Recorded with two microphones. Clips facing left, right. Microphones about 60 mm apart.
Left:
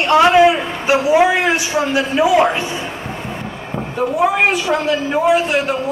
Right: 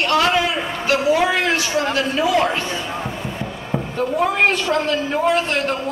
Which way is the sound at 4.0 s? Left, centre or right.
Centre.